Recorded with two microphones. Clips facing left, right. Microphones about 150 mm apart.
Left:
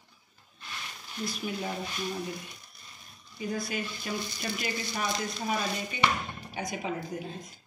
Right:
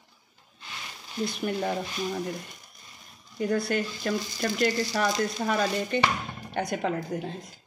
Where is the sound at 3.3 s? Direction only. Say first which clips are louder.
Right 7 dB; 65° right (ahead or behind).